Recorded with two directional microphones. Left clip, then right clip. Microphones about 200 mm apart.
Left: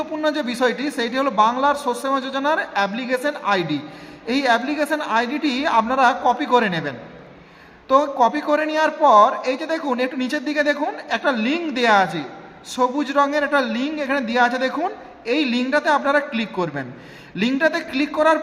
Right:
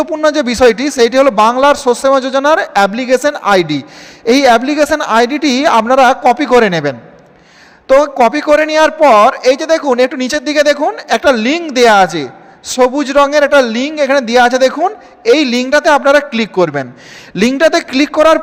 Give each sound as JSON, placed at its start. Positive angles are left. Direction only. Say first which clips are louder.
{"t": 0.0, "sound": "a man's voice", "louder": "right 10 dB", "side_deg": -40}